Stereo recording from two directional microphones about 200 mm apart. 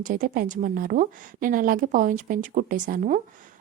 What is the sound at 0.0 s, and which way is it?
Speech, 40° right (ahead or behind).